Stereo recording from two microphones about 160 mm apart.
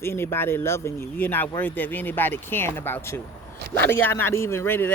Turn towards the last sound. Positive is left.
turn(degrees=15)  # may be behind; listen again after turning